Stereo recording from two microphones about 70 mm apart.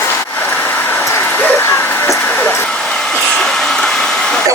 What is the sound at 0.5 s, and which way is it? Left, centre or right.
Vehicle, left.